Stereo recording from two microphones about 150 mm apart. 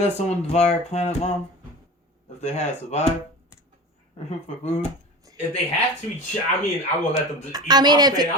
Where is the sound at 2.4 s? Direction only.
50° left (ahead or behind).